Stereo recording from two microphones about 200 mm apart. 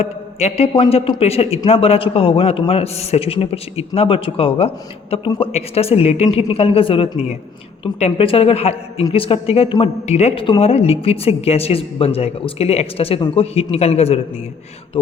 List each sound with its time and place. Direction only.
0.0 s a woman's voice: 35° left (ahead or behind)